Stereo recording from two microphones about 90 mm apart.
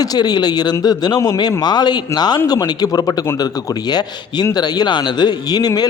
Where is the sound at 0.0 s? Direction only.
50° left (ahead or behind).